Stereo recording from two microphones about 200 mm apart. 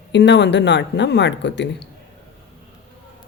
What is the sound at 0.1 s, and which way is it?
Speech, 60° left (ahead or behind).